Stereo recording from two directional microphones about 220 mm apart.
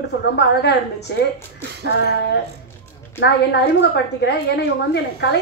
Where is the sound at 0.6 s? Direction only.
50° left (ahead or behind).